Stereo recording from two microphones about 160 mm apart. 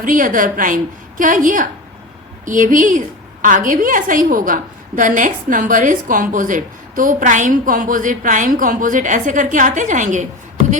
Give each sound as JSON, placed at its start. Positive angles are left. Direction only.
{"t": 0.0, "sound": "a woman's voice", "side_deg": -55}